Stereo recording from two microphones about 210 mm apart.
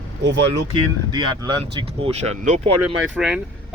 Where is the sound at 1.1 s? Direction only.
20° right (ahead or behind).